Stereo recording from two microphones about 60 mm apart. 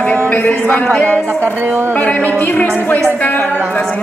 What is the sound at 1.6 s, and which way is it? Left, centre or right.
Music, right.